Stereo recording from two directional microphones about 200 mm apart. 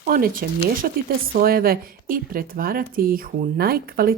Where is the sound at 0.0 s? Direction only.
45° right (ahead or behind).